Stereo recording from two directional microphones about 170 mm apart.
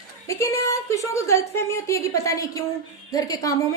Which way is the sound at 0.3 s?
15° left (ahead or behind).